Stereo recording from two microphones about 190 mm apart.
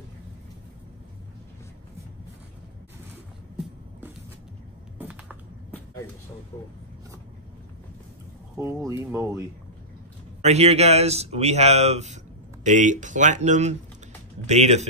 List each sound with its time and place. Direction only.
4.9 s a sound: 10° right (ahead or behind)
8.5 s speech: 15° right (ahead or behind)
10.4 s speech: 35° right (ahead or behind)